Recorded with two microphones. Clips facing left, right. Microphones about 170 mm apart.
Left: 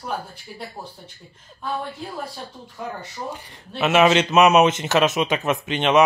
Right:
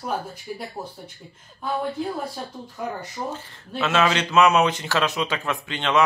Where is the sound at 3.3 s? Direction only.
20° left (ahead or behind).